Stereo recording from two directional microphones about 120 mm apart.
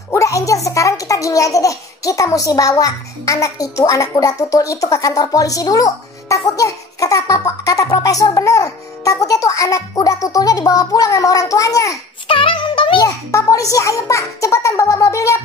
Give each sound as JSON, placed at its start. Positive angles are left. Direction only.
{"t": 0.1, "sound": "a child's voice", "side_deg": 25}
{"t": 12.3, "sound": "music", "side_deg": 45}
{"t": 13.0, "sound": "a child's voice", "side_deg": 30}